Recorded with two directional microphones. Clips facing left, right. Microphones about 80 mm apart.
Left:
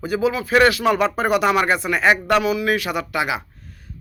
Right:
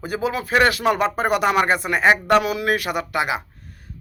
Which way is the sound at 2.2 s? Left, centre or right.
Right.